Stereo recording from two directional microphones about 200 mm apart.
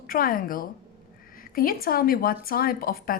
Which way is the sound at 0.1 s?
45° left (ahead or behind).